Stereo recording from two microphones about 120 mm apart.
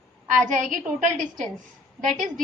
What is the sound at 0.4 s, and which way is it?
A woman's voice, 90° right.